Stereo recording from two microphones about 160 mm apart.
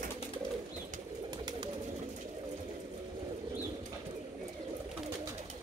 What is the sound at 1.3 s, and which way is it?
Bird, 25° right (ahead or behind).